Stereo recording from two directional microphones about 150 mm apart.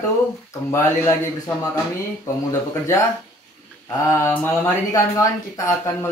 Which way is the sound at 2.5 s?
20° left (ahead or behind).